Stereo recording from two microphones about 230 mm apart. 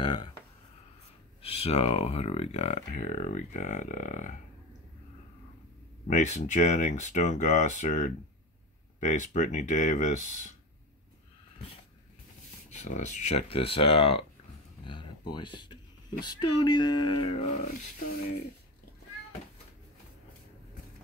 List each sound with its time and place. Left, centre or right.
0.0 s a sound: left
1.4 s speech: left
6.0 s speech: left
12.7 s speech: left